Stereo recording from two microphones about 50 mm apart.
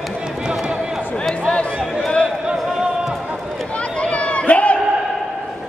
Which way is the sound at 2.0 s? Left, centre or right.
Centre.